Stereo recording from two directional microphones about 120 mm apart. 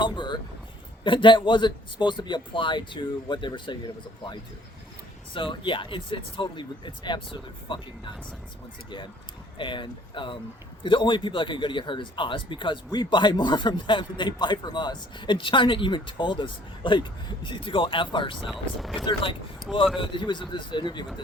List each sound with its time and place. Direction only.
0.0 s a sound: 40° left (ahead or behind)
1.0 s speech: 45° left (ahead or behind)
5.3 s speech: 45° left (ahead or behind)
9.6 s speech: 40° left (ahead or behind)
18.8 s speech: centre (ahead or behind)
19.0 s speech: 45° left (ahead or behind)